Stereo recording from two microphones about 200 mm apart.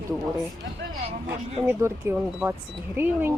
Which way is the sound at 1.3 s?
10° right (ahead or behind).